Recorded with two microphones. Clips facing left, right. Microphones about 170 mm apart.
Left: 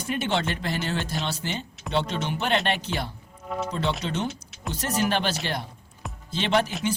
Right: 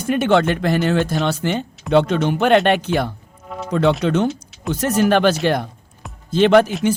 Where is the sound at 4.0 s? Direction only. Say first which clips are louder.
Right 11 dB; 55° right (ahead or behind).